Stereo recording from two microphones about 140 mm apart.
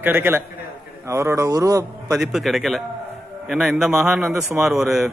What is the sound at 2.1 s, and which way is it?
A man's voice, centre (ahead or behind).